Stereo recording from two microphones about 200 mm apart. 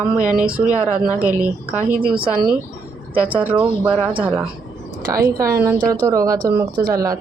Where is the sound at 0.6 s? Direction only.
10° right (ahead or behind).